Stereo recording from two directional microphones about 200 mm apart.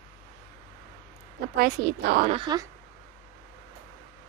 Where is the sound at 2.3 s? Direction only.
25° right (ahead or behind).